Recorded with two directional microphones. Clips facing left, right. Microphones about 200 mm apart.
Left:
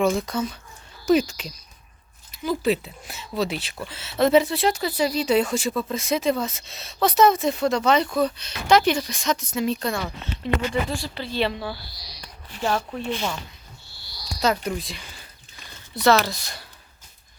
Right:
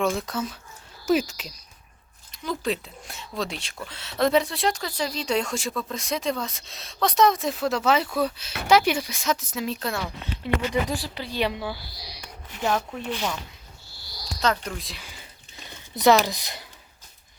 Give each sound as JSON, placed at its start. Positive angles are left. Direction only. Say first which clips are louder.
{"t": 0.0, "sound": "speech", "louder": "left 3 dB", "side_deg": 0}
{"t": 11.1, "sound": "speech", "louder": "left 2 dB", "side_deg": -10}
{"t": 12.2, "sound": "a sound", "louder": "left 1 dB", "side_deg": -15}
{"t": 13.0, "sound": "speech", "louder": "left 2 dB", "side_deg": -10}
{"t": 14.4, "sound": "speech", "louder": "left 3 dB", "side_deg": 10}
{"t": 14.8, "sound": "speech", "louder": "left 4 dB", "side_deg": 0}
{"t": 15.6, "sound": "speech", "louder": "right 1 dB", "side_deg": -15}